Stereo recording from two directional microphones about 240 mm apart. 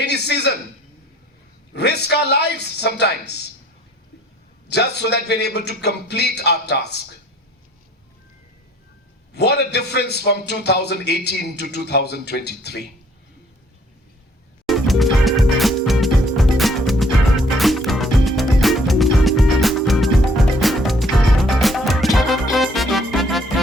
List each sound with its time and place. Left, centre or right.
0.0 s a sound: left
1.7 s a man's voice: left
4.7 s a man's voice: left
9.3 s a man's voice: left
14.7 s music: centre